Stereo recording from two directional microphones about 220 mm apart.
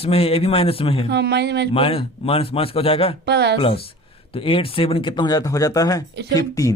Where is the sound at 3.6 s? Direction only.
25° left (ahead or behind).